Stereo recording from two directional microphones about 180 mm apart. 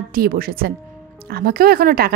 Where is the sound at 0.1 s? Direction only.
55° right (ahead or behind).